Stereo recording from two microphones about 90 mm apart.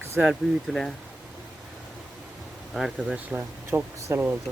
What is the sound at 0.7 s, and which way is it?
Speech, 5° left (ahead or behind).